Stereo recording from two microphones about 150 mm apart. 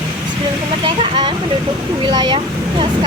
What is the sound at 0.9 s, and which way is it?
Speech, 35° right (ahead or behind).